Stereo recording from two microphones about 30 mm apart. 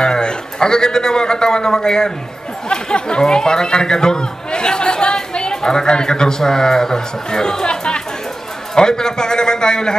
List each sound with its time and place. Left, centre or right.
0.0 s a man's voice: left